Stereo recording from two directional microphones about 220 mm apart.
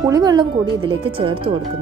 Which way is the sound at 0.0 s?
15° right (ahead or behind).